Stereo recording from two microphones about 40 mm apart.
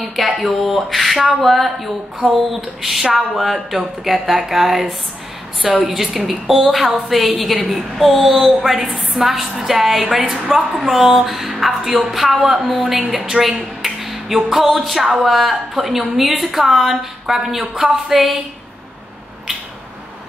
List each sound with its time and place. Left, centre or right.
0.4 s a woman's voice: centre
8.8 s a woman's voice: right
9.2 s a woman's voice: centre